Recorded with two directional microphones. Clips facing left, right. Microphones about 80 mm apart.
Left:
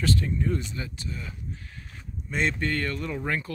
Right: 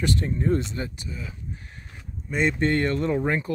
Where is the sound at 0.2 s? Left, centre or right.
Right.